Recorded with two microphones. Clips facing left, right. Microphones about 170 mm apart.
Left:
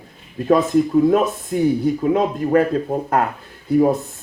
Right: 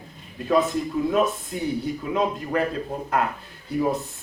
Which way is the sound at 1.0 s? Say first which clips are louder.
Left 6 dB; 50° left (ahead or behind).